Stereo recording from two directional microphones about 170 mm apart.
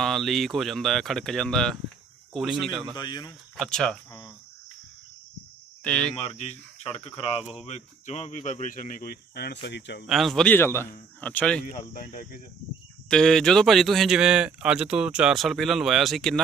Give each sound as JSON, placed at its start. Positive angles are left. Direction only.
{"t": 0.0, "sound": "speech", "side_deg": 0}
{"t": 3.0, "sound": "speech", "side_deg": 25}
{"t": 3.5, "sound": "speech", "side_deg": 0}
{"t": 5.9, "sound": "speech", "side_deg": 5}
{"t": 6.3, "sound": "speech", "side_deg": 40}
{"t": 10.0, "sound": "a man's voice", "side_deg": 0}
{"t": 11.6, "sound": "speech", "side_deg": 55}
{"t": 13.1, "sound": "speech", "side_deg": 5}